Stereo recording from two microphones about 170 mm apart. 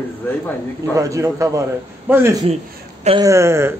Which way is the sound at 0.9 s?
20° right (ahead or behind).